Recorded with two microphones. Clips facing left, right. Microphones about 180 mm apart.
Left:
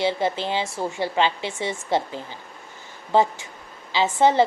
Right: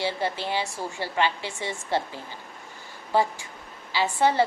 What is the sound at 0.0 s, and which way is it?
A woman's voice, 20° left (ahead or behind).